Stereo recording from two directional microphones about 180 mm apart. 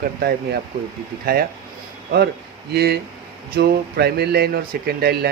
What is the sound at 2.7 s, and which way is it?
Speech, 65° right (ahead or behind).